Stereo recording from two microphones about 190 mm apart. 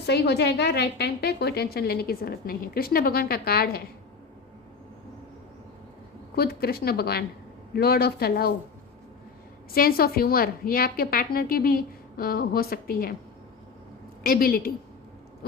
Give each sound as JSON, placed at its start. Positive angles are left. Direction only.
{"t": 0.0, "sound": "a woman's voice", "side_deg": 60}
{"t": 6.3, "sound": "a woman's voice", "side_deg": 55}
{"t": 9.7, "sound": "a woman's voice", "side_deg": 50}
{"t": 14.3, "sound": "a woman's voice", "side_deg": 50}